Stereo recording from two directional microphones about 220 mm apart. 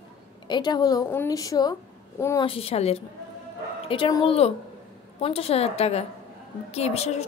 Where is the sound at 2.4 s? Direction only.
25° left (ahead or behind).